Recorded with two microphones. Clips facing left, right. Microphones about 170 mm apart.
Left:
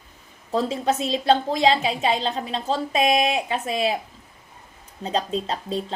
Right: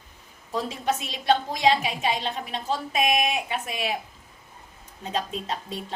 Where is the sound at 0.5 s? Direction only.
25° left (ahead or behind).